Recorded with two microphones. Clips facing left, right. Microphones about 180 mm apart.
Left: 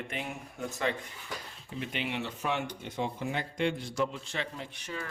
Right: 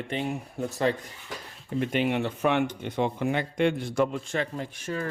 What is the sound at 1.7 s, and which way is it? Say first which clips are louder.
Speech: right 9 dB; 50° right (ahead or behind).